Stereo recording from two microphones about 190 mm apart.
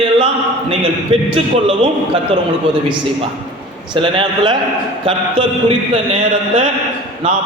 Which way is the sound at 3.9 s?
25° right (ahead or behind).